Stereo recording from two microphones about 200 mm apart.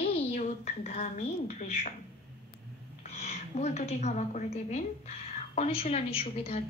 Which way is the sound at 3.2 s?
35° left (ahead or behind).